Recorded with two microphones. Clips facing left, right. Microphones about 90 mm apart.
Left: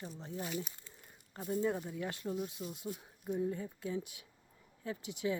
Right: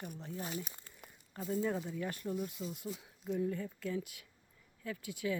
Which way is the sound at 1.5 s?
25° left (ahead or behind).